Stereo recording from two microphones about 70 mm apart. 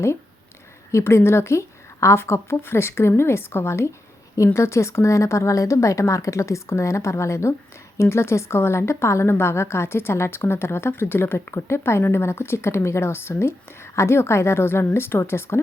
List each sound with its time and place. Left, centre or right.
0.9 s a woman's voice: left